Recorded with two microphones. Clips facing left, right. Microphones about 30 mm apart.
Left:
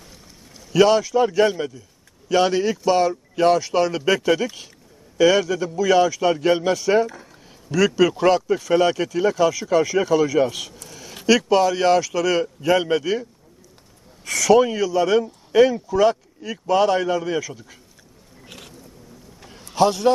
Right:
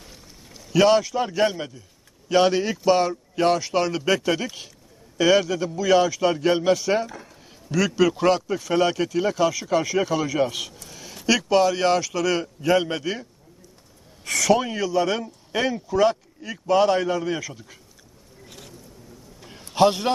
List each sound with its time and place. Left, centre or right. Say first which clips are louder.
0.0 s a sound: even; centre
2.3 s a man's voice: left 1 dB; centre
10.8 s a sound: left 1 dB; centre
11.3 s a man's voice: left 2 dB; centre
14.3 s a man's voice: left 5 dB; centre
18.4 s boat: left 3 dB; left
19.6 s a man's voice: left 2 dB; centre